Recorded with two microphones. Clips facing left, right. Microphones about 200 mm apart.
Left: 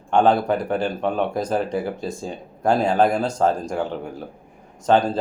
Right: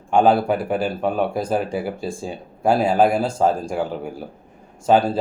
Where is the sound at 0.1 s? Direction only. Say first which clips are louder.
Right 1 dB; 10° right (ahead or behind).